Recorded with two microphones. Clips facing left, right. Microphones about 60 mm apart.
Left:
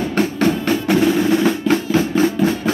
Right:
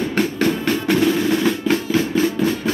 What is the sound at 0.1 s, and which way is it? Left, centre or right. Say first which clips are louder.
Percussion: left 4 dB; centre.